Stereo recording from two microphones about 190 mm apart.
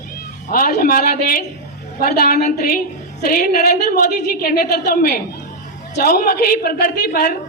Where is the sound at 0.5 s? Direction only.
50° left (ahead or behind).